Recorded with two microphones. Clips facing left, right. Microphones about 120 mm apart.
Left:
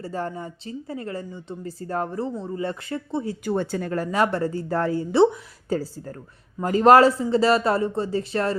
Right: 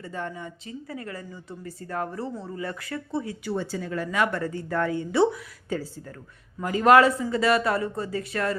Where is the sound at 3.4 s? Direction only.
55° left (ahead or behind).